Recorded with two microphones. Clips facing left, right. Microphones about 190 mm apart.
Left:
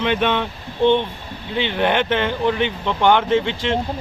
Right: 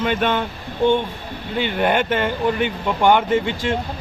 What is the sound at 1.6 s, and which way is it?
Speech, 5° right (ahead or behind).